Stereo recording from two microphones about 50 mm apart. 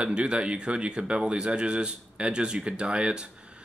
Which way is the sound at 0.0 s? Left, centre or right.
Right.